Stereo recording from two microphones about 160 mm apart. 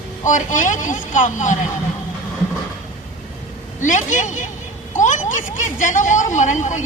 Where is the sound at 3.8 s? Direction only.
50° left (ahead or behind).